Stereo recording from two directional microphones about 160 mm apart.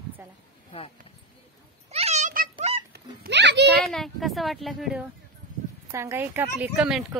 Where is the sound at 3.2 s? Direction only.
90° right.